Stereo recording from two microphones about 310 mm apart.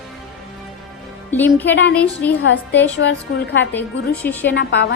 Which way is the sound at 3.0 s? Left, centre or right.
Left.